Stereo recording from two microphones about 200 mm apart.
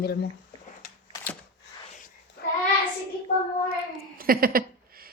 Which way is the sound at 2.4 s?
55° left (ahead or behind).